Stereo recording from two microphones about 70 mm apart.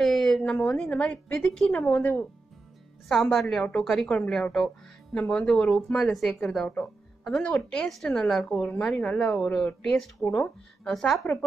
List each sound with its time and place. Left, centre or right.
0.0 s a sound: centre
0.4 s speech: centre
2.0 s a woman's voice: left
3.1 s a woman's voice: centre
10.2 s a woman's voice: left
10.8 s speech: centre